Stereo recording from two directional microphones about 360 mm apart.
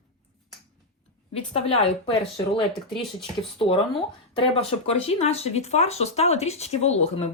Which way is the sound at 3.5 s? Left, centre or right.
Centre.